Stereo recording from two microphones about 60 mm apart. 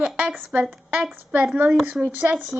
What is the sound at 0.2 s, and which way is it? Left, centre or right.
Speech, right.